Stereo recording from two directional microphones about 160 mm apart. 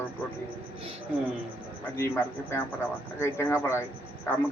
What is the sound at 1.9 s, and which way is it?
Speech, 15° left (ahead or behind).